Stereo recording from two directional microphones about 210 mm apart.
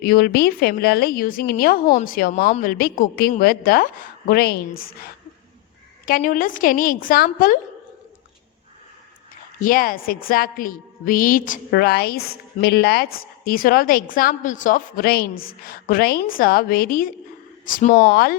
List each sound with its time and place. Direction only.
0.0 s a woman's voice: 45° left (ahead or behind)
9.6 s a woman's voice: 40° left (ahead or behind)